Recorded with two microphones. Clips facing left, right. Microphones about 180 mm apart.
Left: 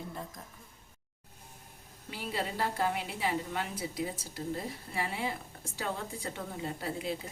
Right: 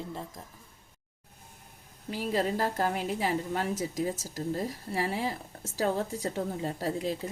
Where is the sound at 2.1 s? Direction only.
40° right (ahead or behind).